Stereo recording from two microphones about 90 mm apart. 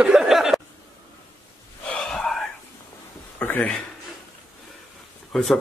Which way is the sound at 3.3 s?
20° left (ahead or behind).